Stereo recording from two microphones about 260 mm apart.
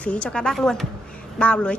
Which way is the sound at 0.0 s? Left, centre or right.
Centre.